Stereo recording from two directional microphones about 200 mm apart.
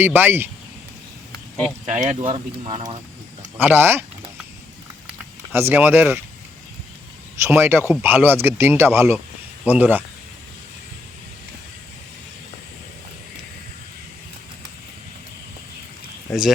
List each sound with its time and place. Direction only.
0.0 s speech: 10° right (ahead or behind)
1.9 s speech: 35° right (ahead or behind)
2.1 s speech: 25° right (ahead or behind)
3.6 s speech: 10° right (ahead or behind)
5.0 s a sound: 10° right (ahead or behind)
7.4 s speech: 10° right (ahead or behind)